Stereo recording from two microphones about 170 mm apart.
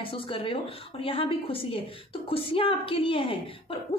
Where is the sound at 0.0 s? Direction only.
30° left (ahead or behind).